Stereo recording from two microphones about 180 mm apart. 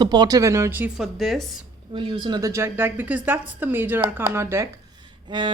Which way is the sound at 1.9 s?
30° right (ahead or behind).